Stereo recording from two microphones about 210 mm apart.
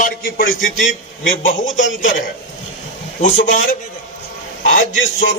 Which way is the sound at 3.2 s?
35° left (ahead or behind).